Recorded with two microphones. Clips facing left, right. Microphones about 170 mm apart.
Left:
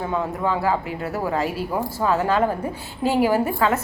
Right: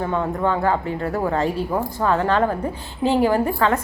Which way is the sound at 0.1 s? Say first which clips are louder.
Even; 5° left (ahead or behind).